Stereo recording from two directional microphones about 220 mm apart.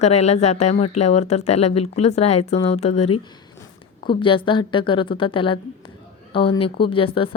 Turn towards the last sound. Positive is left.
turn(degrees=25)  # may be behind; listen again after turning